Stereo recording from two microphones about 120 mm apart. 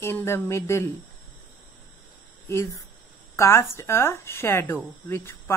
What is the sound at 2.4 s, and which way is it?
A woman's voice, 20° left (ahead or behind).